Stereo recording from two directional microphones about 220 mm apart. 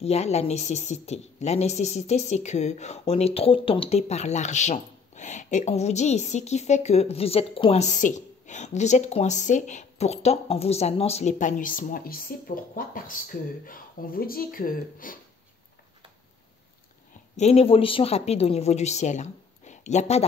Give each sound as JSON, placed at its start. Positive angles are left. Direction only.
{"t": 0.0, "sound": "speech", "side_deg": 30}
{"t": 17.4, "sound": "speech", "side_deg": 25}